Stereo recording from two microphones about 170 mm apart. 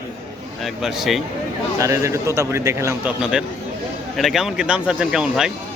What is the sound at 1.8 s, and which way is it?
A man's voice, 20° right (ahead or behind).